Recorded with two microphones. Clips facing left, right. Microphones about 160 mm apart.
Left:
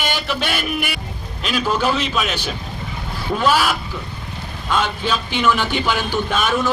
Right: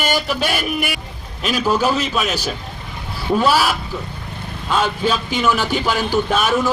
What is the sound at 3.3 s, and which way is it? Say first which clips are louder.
Speech: right 2 dB; 5° right (ahead or behind).